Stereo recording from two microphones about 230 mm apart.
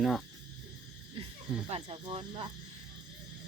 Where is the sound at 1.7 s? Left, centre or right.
Right.